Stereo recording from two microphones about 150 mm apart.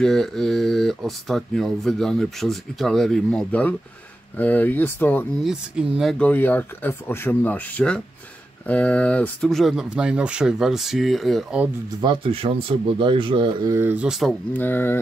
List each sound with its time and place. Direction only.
0.0 s speech: 5° left (ahead or behind)
5.4 s speech: 5° right (ahead or behind)
12.0 s speech: 35° right (ahead or behind)
13.7 s speech: 15° right (ahead or behind)
14.5 s speech: 15° left (ahead or behind)